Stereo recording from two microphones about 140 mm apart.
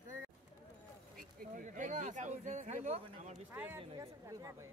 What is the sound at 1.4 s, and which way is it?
Speech, 65° right (ahead or behind).